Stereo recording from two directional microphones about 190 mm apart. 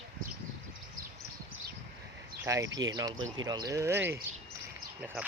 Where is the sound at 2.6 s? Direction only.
80° right.